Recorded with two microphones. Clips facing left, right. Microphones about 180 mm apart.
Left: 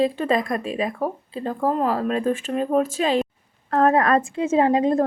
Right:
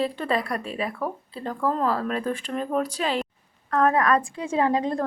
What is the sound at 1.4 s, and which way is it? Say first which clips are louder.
Speech: left 3 dB; 35° left (ahead or behind).